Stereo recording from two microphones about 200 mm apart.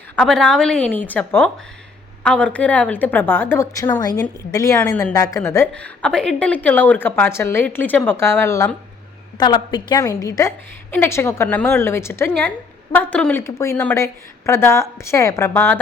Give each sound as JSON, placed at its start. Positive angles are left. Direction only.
{"t": 0.2, "sound": "a woman's voice", "side_deg": 5}